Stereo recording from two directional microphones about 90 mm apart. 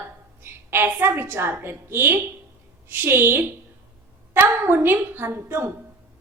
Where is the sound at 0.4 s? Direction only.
25° right (ahead or behind).